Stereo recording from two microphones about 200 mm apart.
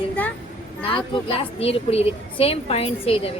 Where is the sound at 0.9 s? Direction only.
25° left (ahead or behind).